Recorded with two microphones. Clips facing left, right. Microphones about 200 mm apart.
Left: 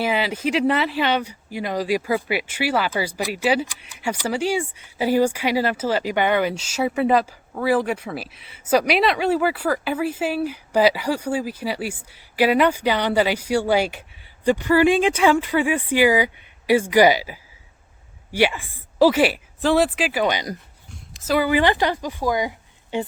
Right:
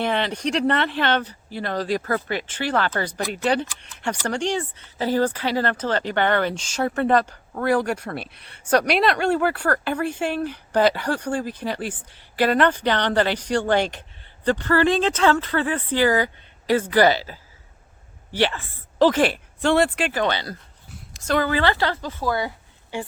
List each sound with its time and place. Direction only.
0.0 s speech: 5° left (ahead or behind)
20.9 s speech: centre (ahead or behind); by 23.0 s 15° left (ahead or behind)